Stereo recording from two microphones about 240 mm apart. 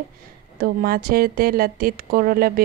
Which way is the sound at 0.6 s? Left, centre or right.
Right.